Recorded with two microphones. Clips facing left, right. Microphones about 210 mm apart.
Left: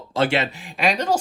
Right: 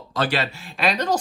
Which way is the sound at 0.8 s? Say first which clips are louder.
Left 1 dB; 10° left (ahead or behind).